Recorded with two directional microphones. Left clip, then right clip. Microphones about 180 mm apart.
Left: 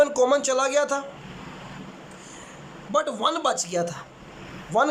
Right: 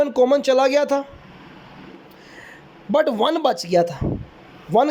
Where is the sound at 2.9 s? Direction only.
30° right (ahead or behind).